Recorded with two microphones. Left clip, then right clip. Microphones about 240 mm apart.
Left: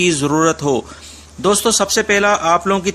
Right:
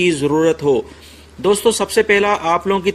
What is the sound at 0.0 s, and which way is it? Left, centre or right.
Speech, left.